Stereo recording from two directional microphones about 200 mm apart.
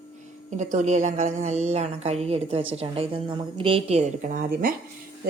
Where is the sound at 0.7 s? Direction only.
35° right (ahead or behind).